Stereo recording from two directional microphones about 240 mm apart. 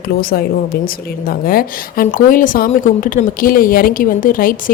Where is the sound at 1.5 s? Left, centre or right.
Left.